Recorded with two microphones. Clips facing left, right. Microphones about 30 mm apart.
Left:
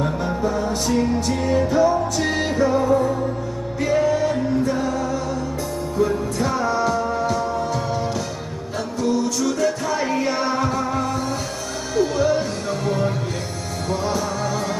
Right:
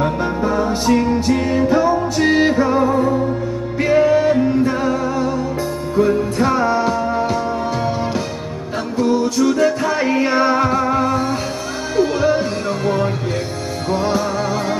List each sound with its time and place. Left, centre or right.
0.0 s music: right